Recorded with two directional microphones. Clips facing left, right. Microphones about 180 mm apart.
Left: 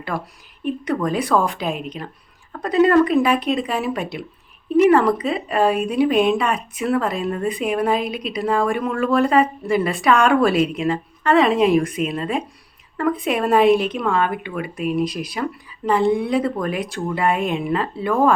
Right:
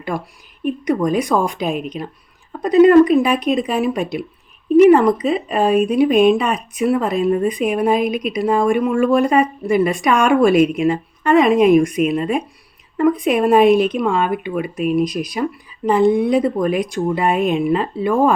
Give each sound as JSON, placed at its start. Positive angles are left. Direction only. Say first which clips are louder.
{"t": 0.1, "sound": "speech", "louder": "right 2 dB", "side_deg": -15}